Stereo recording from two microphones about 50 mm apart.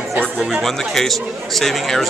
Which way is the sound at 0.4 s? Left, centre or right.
Centre.